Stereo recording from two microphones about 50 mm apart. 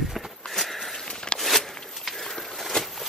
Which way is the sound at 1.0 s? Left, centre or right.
Centre.